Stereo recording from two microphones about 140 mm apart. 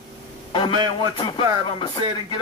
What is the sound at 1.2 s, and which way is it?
Speech, 40° left (ahead or behind).